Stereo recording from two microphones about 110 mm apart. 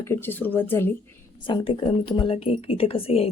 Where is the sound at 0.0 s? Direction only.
20° left (ahead or behind).